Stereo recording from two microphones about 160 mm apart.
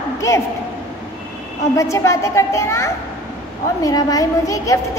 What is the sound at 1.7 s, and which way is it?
A woman's voice, 20° left (ahead or behind).